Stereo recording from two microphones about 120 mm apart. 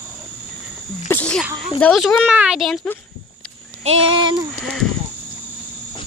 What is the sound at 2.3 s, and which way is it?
Speech, 10° right (ahead or behind).